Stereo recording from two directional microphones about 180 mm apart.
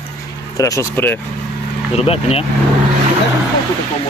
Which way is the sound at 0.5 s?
20° left (ahead or behind).